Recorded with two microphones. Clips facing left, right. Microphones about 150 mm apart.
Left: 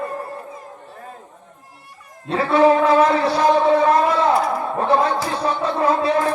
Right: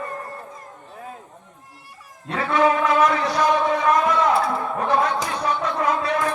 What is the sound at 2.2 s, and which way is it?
Speech, 30° left (ahead or behind).